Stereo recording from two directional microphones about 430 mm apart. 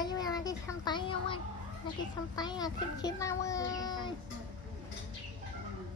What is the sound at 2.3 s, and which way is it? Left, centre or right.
A child's voice, centre.